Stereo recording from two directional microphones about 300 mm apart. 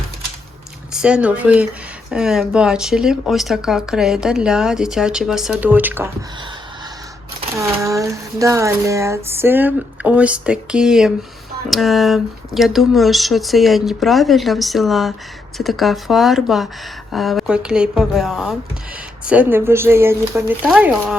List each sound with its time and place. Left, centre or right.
0.9 s speech: centre
7.5 s speech: centre